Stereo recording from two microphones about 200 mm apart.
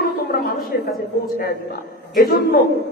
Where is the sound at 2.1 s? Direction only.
45° left (ahead or behind).